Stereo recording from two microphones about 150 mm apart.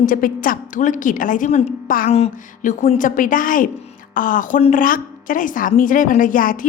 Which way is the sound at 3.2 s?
65° left (ahead or behind).